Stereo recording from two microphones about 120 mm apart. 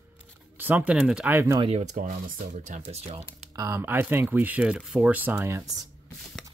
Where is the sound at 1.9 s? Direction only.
90° right.